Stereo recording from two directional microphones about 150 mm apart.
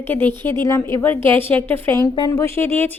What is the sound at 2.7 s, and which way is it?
Speech, 15° left (ahead or behind).